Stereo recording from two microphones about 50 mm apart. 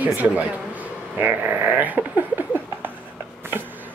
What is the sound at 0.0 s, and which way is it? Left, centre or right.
Speech, right.